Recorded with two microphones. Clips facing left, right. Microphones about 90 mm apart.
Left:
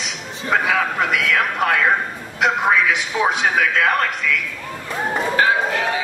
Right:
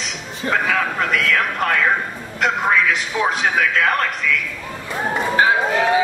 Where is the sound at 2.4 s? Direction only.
5° left (ahead or behind).